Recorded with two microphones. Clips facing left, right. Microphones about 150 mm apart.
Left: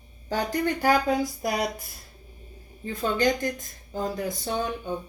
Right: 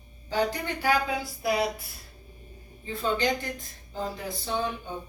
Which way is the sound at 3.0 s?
45° left (ahead or behind).